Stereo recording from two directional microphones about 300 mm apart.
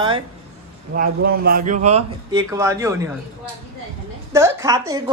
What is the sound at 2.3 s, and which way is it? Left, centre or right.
Speech, centre.